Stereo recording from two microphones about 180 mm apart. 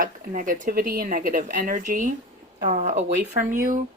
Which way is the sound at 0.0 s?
50° right (ahead or behind).